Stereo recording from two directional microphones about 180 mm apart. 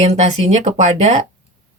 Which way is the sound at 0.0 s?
40° right (ahead or behind).